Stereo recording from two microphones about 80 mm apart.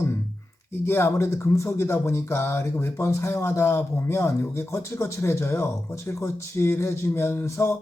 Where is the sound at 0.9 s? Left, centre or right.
Left.